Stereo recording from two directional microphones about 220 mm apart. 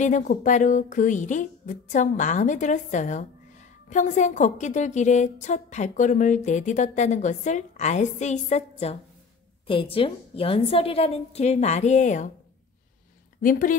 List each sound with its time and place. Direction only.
0.0 s a woman's voice: 35° left (ahead or behind)
13.4 s speech: 40° left (ahead or behind)